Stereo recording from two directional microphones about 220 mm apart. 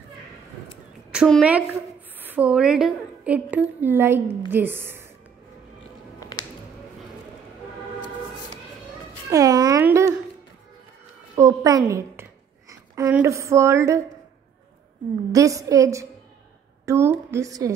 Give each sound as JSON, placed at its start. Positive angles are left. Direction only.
{"t": 1.1, "sound": "a woman's voice", "side_deg": -5}
{"t": 6.1, "sound": "music", "side_deg": 20}
{"t": 9.3, "sound": "a sound", "side_deg": -15}
{"t": 11.3, "sound": "a woman's voice", "side_deg": -15}
{"t": 15.3, "sound": "a woman's voice", "side_deg": -15}